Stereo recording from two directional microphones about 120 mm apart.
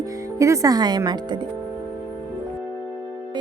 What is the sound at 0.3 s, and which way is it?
Speech, 25° right (ahead or behind).